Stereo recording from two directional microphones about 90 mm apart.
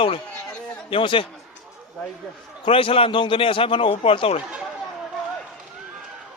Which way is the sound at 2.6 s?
90° left.